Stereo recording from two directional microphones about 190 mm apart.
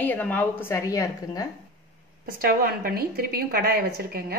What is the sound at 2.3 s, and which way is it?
A woman's voice, 50° right (ahead or behind).